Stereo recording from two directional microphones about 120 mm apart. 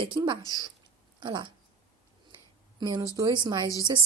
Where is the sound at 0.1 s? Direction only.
35° right (ahead or behind).